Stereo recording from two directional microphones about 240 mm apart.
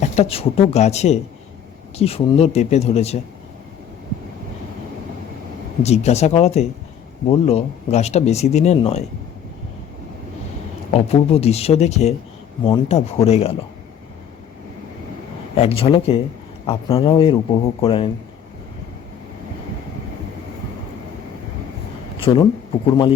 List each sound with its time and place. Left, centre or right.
0.0 s speech: left
5.8 s speech: left
10.9 s speech: left
15.5 s speech: left
22.2 s speech: left